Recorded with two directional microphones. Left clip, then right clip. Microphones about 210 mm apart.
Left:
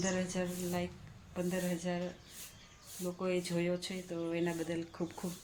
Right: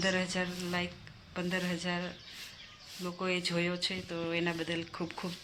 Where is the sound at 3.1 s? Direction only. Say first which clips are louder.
Right 3 dB; 5° right (ahead or behind).